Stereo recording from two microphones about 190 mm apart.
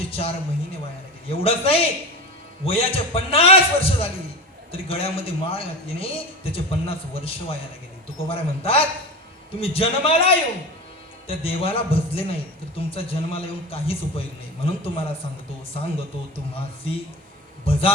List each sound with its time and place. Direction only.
0.1 s a man's voice: 30° left (ahead or behind)
16.3 s a man's voice: 30° left (ahead or behind)